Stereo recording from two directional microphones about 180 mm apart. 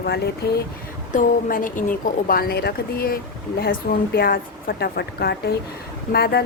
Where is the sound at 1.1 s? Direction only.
45° left (ahead or behind).